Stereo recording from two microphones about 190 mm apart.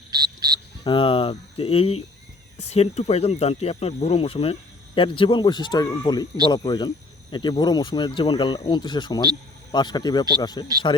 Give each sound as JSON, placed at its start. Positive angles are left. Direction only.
{"t": 0.1, "sound": "frog", "side_deg": -20}
{"t": 0.9, "sound": "speech", "side_deg": 25}